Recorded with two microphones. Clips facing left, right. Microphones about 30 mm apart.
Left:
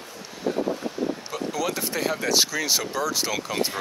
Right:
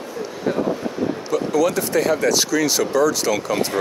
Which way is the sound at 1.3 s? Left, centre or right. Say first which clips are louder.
Right 9 dB; centre.